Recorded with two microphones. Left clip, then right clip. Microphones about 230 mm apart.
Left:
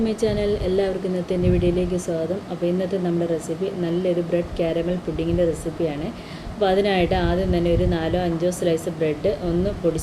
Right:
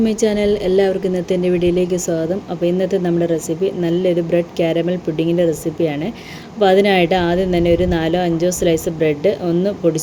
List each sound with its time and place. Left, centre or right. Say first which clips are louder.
0.0 s speech: right 6 dB; right